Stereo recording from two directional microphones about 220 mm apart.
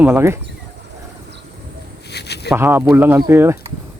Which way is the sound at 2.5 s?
10° right (ahead or behind).